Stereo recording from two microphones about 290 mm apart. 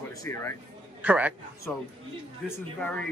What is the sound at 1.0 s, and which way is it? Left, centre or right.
Speech, centre.